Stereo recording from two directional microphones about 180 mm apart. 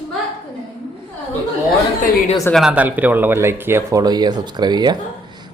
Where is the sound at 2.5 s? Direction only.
5° right (ahead or behind).